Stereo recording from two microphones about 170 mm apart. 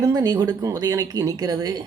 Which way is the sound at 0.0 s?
20° right (ahead or behind).